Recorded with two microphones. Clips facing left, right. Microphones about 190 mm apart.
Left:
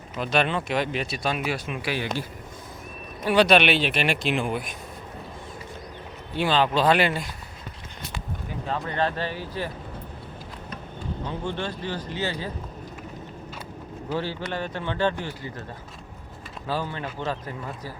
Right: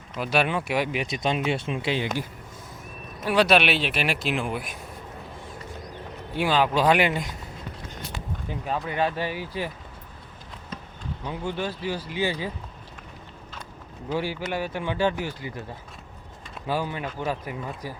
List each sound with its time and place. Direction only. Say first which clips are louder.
0.2 s speech: even; 10° right (ahead or behind)
3.2 s speech: left 2 dB; centre (ahead or behind)
6.3 s speech: even; 10° right (ahead or behind)
8.6 s speech: even; 10° right (ahead or behind)
11.3 s speech: right 2 dB; 10° right (ahead or behind)
14.1 s speech: right 1 dB; 10° right (ahead or behind)
16.6 s speech: right 1 dB; 15° right (ahead or behind)